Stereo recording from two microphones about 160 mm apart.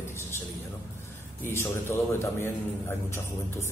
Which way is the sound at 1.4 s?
15° left (ahead or behind).